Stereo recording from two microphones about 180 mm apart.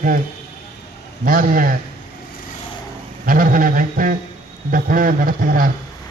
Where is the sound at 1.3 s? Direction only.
50° right (ahead or behind).